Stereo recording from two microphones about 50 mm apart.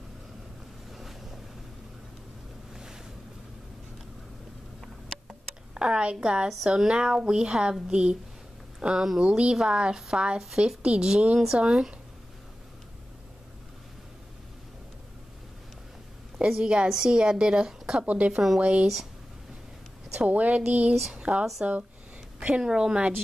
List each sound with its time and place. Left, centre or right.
0.9 s boat: centre
2.7 s boat: centre
5.8 s a woman's voice: centre
16.4 s a woman's voice: centre
18.0 s a woman's voice: right
18.3 s a woman's voice: centre
18.6 s a woman's voice: right
20.2 s a woman's voice: right
21.1 s a woman's voice: centre